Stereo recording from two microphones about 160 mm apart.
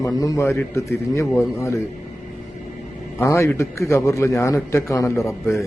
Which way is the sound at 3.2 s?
20° left (ahead or behind).